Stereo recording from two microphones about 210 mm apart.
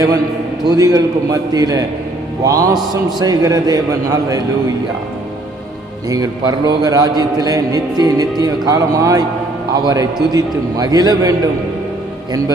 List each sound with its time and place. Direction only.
0.6 s a man's voice: 20° right (ahead or behind)
6.1 s a man's voice: 20° right (ahead or behind)